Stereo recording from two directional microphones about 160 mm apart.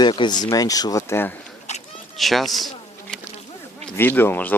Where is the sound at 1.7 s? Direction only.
45° left (ahead or behind).